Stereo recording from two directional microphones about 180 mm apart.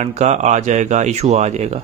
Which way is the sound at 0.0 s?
40° right (ahead or behind).